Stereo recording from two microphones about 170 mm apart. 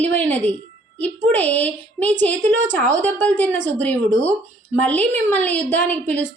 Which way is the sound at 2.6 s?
50° right (ahead or behind).